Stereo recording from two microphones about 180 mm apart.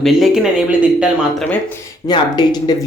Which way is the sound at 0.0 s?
Centre (ahead or behind).